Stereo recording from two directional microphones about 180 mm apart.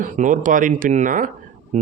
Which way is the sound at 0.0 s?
45° right (ahead or behind).